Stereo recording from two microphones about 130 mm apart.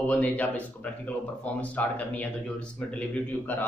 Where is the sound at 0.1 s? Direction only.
10° left (ahead or behind).